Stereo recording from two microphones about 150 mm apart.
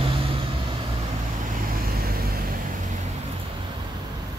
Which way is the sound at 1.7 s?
80° right.